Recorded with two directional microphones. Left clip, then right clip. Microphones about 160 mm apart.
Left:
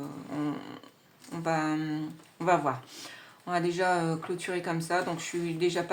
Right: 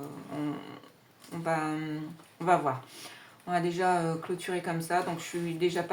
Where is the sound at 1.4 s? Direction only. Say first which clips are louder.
Left 1 dB; 35° left (ahead or behind).